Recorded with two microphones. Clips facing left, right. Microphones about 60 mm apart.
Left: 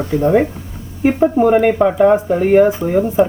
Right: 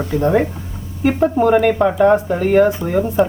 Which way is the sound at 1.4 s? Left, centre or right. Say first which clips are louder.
Left 1 dB; centre.